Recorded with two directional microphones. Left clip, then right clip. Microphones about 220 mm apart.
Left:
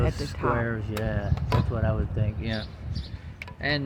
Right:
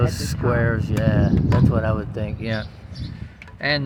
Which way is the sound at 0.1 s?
55° right (ahead or behind).